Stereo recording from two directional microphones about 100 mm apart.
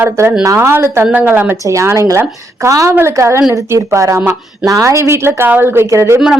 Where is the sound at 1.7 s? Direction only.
30° right (ahead or behind).